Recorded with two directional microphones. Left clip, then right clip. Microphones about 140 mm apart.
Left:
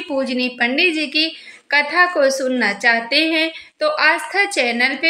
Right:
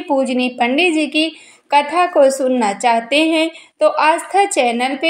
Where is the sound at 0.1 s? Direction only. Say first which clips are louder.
Right 5 dB; 20° right (ahead or behind).